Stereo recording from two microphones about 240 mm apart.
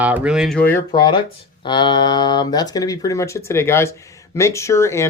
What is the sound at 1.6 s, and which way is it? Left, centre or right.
Speech, centre.